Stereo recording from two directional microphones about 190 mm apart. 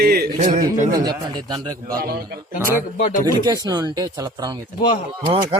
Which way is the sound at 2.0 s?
55° right (ahead or behind).